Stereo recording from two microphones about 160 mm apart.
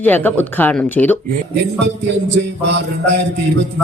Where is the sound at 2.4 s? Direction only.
90° right.